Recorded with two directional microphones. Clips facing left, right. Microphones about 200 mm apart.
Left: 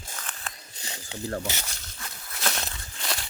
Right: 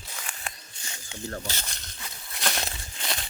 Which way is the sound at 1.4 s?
15° left (ahead or behind).